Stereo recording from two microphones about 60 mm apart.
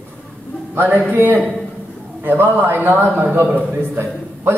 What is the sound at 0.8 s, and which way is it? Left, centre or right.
A man's voice, right.